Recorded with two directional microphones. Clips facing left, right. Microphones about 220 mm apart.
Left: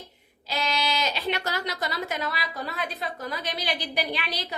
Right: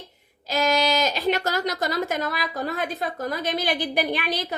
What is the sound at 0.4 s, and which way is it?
A woman's voice, 45° right (ahead or behind).